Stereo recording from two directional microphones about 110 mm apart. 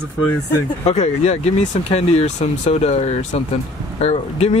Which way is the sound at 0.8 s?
75° left (ahead or behind).